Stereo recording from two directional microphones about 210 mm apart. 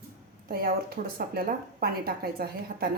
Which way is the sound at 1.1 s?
45° right (ahead or behind).